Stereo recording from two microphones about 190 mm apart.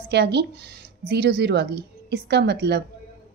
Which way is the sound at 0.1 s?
65° right (ahead or behind).